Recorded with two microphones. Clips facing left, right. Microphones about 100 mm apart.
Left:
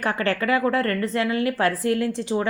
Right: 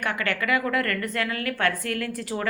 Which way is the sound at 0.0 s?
35° left (ahead or behind).